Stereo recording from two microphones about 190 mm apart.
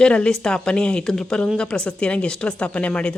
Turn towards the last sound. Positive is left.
turn(degrees=5)  # may be behind; listen again after turning